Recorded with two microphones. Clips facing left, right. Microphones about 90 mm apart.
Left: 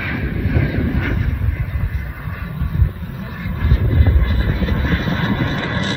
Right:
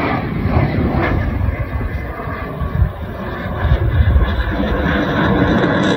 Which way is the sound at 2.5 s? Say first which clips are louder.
Right 3 dB; 45° right (ahead or behind).